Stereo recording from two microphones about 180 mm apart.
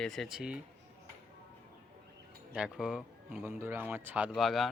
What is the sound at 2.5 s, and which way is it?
Speech, 5° right (ahead or behind).